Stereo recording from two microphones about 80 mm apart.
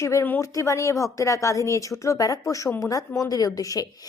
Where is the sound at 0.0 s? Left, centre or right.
Left.